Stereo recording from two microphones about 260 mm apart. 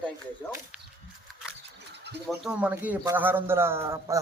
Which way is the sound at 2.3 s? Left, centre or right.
Centre.